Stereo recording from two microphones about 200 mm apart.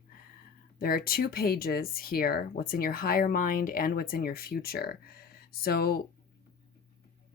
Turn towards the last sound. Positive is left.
turn(degrees=50)  # may be behind; listen again after turning